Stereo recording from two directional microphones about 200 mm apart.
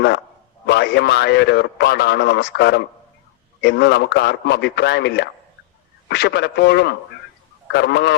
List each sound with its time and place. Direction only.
0.7 s a man's voice: 55° left (ahead or behind)